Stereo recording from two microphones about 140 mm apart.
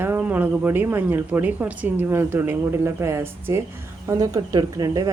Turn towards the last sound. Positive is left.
turn(degrees=-25)  # may be behind; listen again after turning